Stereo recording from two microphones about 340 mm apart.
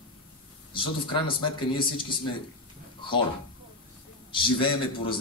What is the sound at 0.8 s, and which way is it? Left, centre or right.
A man's voice, centre.